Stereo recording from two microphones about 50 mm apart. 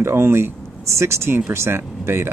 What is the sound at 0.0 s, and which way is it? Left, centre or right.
Speech, right.